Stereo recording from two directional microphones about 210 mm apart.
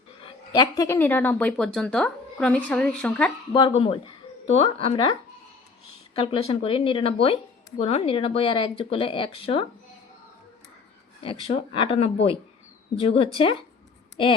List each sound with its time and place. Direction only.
0.2 s a woman's voice: 20° left (ahead or behind); by 3.3 s 5° left (ahead or behind)
3.5 s speech: 25° left (ahead or behind)
6.1 s speech: 25° left (ahead or behind)
11.2 s speech: 30° left (ahead or behind)